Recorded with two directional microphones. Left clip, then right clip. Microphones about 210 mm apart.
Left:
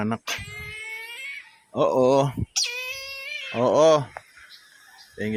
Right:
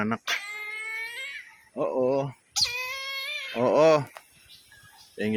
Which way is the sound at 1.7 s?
30° left (ahead or behind).